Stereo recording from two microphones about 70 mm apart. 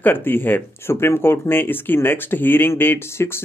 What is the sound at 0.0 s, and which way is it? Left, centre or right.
Speech, left.